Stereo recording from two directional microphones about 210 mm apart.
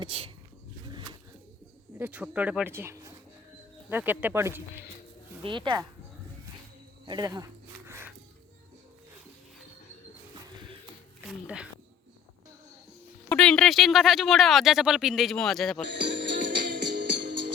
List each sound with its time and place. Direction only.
0.0 s speech: 25° right (ahead or behind)
0.9 s pigeon: 20° right (ahead or behind)
2.0 s speech: 5° right (ahead or behind)
5.4 s speech: 25° right (ahead or behind)
7.0 s snake: 20° right (ahead or behind)
11.3 s speech: 5° right (ahead or behind)
13.2 s speech: 5° left (ahead or behind)
15.9 s music: 55° right (ahead or behind)